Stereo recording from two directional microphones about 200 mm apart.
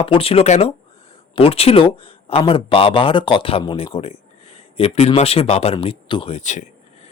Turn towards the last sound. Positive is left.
turn(degrees=35)  # may be behind; listen again after turning